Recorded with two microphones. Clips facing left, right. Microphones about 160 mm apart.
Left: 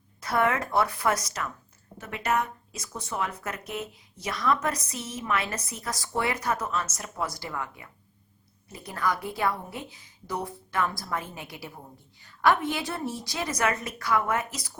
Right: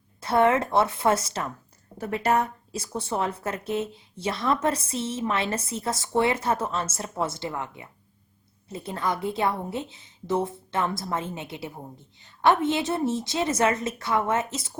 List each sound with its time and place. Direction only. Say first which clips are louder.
0.2 s a woman's voice: right 5 dB; 25° right (ahead or behind)